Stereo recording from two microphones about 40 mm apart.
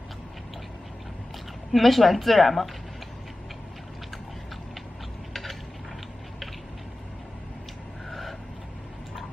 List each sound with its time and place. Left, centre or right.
1.7 s a woman's voice: centre
5.3 s a sound: centre
8.1 s vehicle: centre